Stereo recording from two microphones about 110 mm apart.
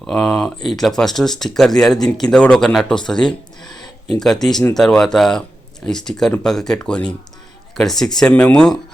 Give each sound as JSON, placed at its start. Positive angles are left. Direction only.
{"t": 0.0, "sound": "speech", "side_deg": 5}